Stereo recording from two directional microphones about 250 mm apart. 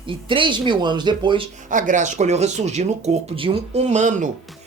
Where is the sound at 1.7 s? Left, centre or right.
Right.